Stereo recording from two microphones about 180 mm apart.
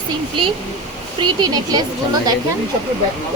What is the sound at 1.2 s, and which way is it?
Speech, 20° right (ahead or behind).